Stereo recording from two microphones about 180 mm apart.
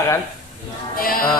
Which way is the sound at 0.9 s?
55° left (ahead or behind).